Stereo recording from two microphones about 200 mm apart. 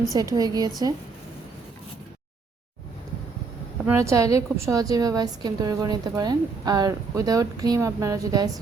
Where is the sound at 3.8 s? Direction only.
15° right (ahead or behind).